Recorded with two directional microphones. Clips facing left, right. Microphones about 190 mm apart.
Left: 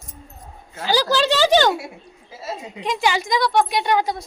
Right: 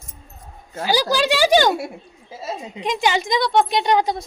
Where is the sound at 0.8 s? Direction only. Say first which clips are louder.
Even; 15° right (ahead or behind).